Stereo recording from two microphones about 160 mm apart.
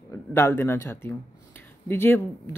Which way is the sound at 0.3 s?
15° left (ahead or behind).